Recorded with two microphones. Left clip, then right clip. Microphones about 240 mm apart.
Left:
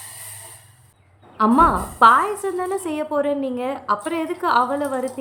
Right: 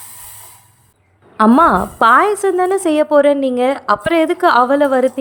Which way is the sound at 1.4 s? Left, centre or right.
Right.